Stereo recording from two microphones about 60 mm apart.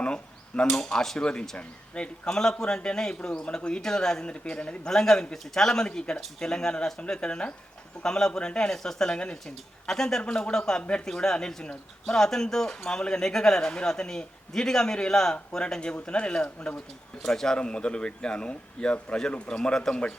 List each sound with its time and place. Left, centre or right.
0.0 s speech: centre